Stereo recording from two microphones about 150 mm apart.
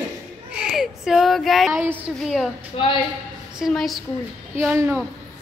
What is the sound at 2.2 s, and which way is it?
Speech, centre (ahead or behind).